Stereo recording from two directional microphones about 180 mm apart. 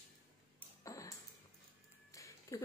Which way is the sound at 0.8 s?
15° left (ahead or behind).